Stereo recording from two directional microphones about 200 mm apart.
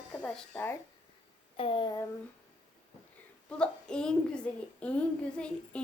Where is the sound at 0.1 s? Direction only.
5° left (ahead or behind).